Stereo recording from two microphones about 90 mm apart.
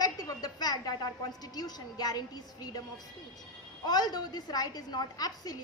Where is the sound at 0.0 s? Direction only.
45° left (ahead or behind).